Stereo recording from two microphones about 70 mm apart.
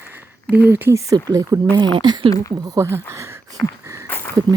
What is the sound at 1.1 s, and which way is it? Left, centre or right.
Speech, right.